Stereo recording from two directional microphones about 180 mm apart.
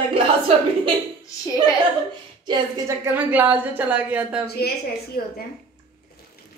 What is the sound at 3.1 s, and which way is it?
A woman's voice, 10° right (ahead or behind).